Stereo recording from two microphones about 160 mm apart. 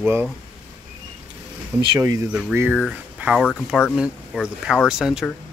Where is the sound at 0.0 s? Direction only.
15° right (ahead or behind).